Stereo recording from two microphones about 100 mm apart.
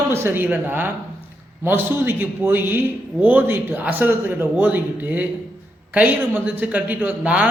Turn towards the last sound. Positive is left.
turn(degrees=-10)  # may be behind; listen again after turning